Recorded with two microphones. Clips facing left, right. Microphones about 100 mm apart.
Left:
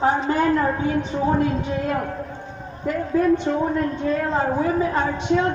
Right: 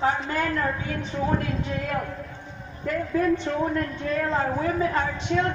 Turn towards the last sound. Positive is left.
turn(degrees=15)  # may be behind; listen again after turning